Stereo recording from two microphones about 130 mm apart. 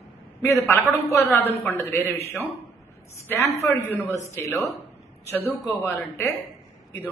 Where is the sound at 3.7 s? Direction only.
20° left (ahead or behind).